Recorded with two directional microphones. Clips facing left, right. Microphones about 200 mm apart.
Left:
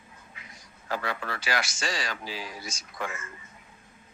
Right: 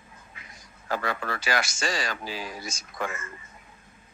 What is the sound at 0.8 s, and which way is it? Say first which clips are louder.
A man's voice: right 2 dB; 45° right (ahead or behind).